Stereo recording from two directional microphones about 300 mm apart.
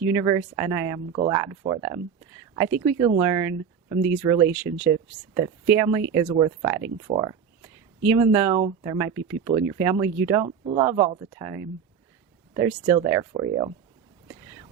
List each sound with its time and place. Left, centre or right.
0.1 s speech: centre
7.1 s a sound: centre
8.6 s speech: centre
14.3 s whispering: centre